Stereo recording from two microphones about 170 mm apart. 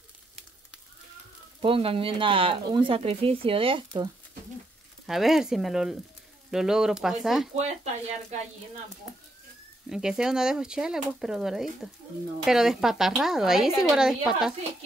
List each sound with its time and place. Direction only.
1.6 s speech: 35° right (ahead or behind)
5.0 s speech: centre (ahead or behind)
7.5 s speech: 40° right (ahead or behind)
9.8 s speech: 5° right (ahead or behind)